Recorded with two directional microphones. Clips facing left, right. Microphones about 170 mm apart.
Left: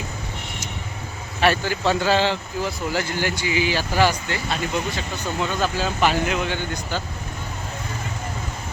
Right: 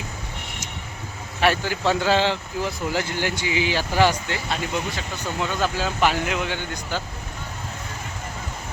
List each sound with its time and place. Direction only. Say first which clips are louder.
1.4 s speech: left 1 dB; 15° right (ahead or behind)